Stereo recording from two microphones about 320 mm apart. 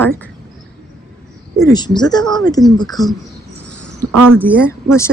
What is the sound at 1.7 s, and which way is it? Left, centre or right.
Speech, centre.